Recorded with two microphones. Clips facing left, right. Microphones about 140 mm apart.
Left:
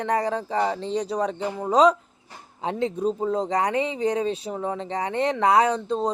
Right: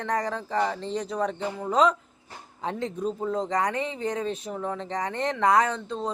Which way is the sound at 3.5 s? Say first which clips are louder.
Left 3 dB; 10° left (ahead or behind).